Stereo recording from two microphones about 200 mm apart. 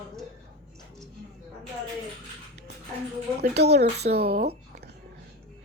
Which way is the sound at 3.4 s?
55° right (ahead or behind).